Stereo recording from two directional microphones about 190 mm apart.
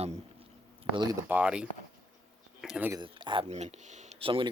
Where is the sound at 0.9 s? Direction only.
20° right (ahead or behind).